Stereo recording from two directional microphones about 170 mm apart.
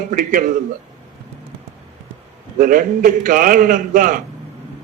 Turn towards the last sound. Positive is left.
turn(degrees=-55)  # may be behind; listen again after turning